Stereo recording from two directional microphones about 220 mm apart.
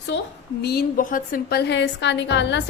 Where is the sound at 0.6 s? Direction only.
45° left (ahead or behind).